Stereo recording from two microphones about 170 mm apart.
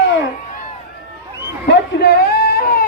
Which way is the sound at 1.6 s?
70° left (ahead or behind).